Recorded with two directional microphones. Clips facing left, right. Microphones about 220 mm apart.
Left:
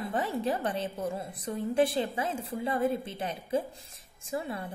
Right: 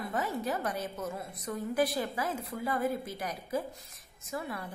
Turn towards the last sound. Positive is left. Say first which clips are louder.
# left 3 dB
turn(degrees=25)  # may be behind; listen again after turning